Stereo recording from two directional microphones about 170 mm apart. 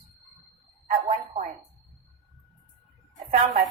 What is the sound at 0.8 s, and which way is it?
Speech, 45° right (ahead or behind).